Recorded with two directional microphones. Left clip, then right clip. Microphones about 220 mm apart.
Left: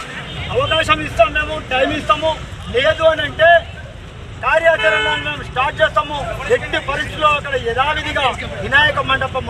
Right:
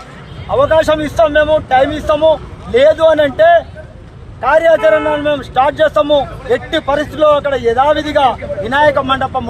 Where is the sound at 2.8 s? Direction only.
25° right (ahead or behind).